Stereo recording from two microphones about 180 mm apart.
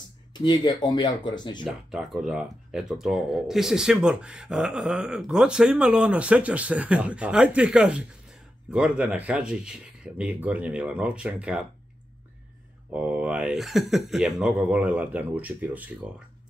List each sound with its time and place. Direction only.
0.3 s speech: 20° left (ahead or behind)
1.9 s speech: 5° right (ahead or behind)
12.9 s speech: 5° right (ahead or behind)